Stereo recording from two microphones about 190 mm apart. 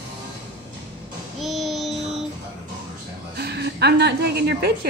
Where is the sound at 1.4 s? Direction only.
Centre (ahead or behind).